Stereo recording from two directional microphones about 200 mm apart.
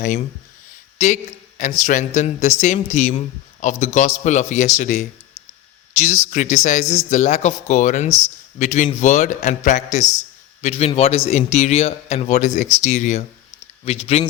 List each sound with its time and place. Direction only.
0.9 s a sound: 35° left (ahead or behind)
1.8 s a man's voice: 35° left (ahead or behind)
6.3 s a man's voice: 35° left (ahead or behind)